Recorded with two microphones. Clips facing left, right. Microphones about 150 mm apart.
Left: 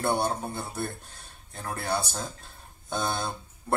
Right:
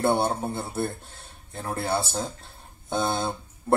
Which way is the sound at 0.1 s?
25° right (ahead or behind).